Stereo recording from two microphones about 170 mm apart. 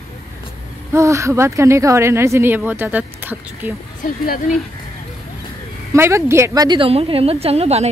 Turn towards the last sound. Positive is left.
turn(degrees=-35)  # may be behind; listen again after turning